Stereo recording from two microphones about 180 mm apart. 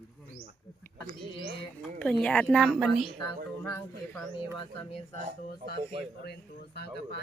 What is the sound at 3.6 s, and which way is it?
Mantra, 15° left (ahead or behind).